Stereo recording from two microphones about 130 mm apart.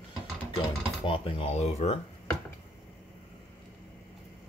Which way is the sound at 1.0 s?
45° left (ahead or behind).